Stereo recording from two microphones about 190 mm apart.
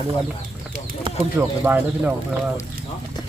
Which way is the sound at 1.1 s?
25° right (ahead or behind).